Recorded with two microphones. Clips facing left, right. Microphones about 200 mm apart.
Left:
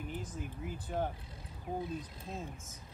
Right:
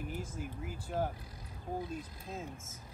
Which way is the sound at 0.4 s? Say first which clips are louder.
Even; centre (ahead or behind).